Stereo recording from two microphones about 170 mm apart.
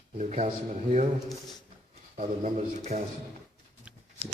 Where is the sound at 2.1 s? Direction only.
45° right (ahead or behind).